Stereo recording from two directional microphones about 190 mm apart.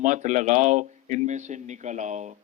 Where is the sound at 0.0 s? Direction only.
40° right (ahead or behind).